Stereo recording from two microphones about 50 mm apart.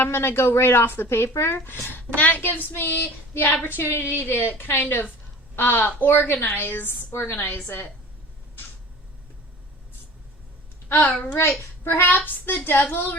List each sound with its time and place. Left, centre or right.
0.0 s speech: left
0.9 s a woman's voice: left
7.1 s speech: left
7.3 s a child's voice: left
10.9 s a child's voice: left
11.8 s a child's voice: left